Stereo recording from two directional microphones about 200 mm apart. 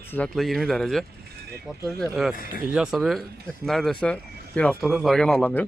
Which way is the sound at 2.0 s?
Centre (ahead or behind).